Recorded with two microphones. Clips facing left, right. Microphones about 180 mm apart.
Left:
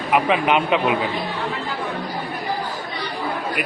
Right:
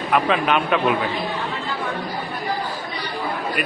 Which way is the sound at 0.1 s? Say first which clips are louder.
Left 1 dB; 15° left (ahead or behind).